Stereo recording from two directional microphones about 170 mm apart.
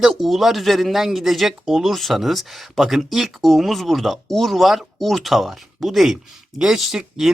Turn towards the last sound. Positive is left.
turn(degrees=-5)  # may be behind; listen again after turning